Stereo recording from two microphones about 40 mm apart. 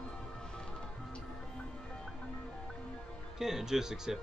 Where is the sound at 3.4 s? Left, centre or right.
Centre.